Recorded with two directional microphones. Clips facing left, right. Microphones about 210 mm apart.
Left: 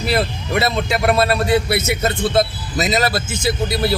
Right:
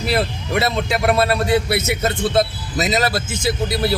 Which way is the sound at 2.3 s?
20° right (ahead or behind).